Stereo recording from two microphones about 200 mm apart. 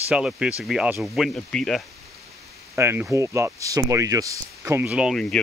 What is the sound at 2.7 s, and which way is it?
Speech, 10° right (ahead or behind).